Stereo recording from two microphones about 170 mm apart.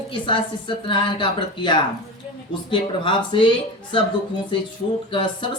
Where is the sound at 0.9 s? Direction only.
30° left (ahead or behind).